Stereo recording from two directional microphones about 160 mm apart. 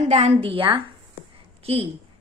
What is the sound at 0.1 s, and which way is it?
A woman's voice, 40° right (ahead or behind).